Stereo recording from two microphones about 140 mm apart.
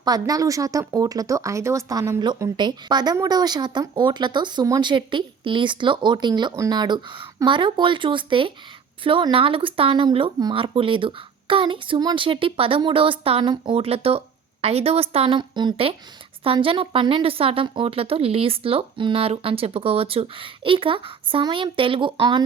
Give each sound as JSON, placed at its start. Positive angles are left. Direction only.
{"t": 0.0, "sound": "speech", "side_deg": -25}